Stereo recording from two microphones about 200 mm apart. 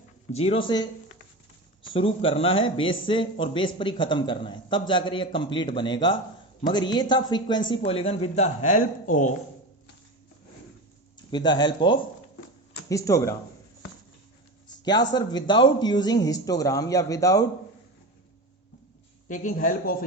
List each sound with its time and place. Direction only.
0.3 s speech: 30° left (ahead or behind)
1.9 s speech: 25° left (ahead or behind)
11.3 s speech: 20° left (ahead or behind)
14.8 s speech: 20° left (ahead or behind)
19.3 s speech: 40° left (ahead or behind)